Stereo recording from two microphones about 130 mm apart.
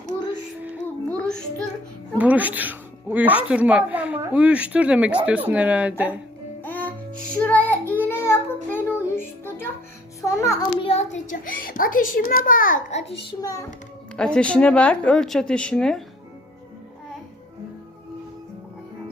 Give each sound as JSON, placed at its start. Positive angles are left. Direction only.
{"t": 0.9, "sound": "child singing", "side_deg": 10}
{"t": 2.1, "sound": "speech", "side_deg": -10}
{"t": 6.6, "sound": "music", "side_deg": 15}
{"t": 7.3, "sound": "child singing", "side_deg": 10}
{"t": 10.2, "sound": "music", "side_deg": 25}
{"t": 10.8, "sound": "a child's voice", "side_deg": 45}
{"t": 11.1, "sound": "a child's voice", "side_deg": 90}
{"t": 13.4, "sound": "a child's voice", "side_deg": 25}
{"t": 14.2, "sound": "speech", "side_deg": 10}